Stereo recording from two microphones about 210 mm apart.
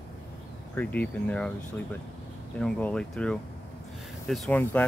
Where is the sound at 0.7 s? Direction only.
5° left (ahead or behind).